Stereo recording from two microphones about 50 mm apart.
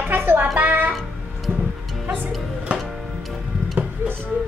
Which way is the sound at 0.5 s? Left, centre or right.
Right.